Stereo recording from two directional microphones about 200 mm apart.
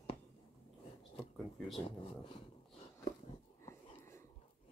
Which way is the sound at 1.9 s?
25° left (ahead or behind).